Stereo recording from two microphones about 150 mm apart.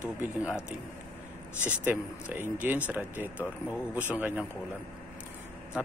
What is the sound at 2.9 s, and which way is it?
Speech, 10° right (ahead or behind).